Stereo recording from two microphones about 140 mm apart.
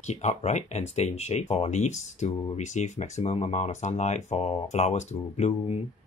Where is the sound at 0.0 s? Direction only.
55° left (ahead or behind).